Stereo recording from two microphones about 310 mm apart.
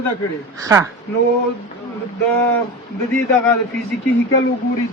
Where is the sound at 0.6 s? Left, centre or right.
Centre.